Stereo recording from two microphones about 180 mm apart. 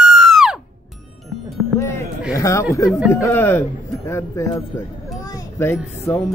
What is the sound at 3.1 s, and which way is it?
Speech, 15° left (ahead or behind).